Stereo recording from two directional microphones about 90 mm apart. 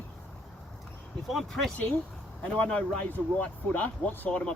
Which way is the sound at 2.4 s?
10° left (ahead or behind).